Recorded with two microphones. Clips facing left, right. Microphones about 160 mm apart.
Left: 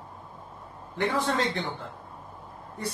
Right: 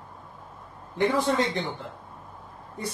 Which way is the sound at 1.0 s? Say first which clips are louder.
Right 3 dB; 15° right (ahead or behind).